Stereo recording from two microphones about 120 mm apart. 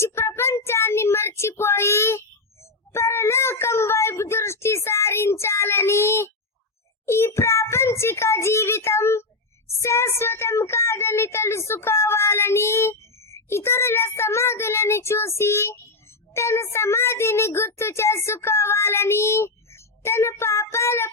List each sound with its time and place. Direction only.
0.0 s child singing: 25° left (ahead or behind)
2.9 s a sound: 20° left (ahead or behind)
9.8 s speech: 20° left (ahead or behind)